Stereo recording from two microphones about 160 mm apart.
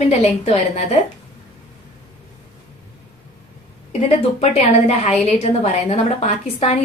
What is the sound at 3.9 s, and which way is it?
A woman's voice, 40° left (ahead or behind).